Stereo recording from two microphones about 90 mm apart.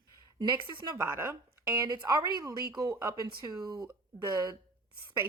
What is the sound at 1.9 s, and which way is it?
Speech, 50° right (ahead or behind).